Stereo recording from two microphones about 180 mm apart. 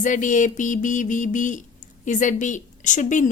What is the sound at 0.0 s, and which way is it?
A woman's voice, 45° left (ahead or behind).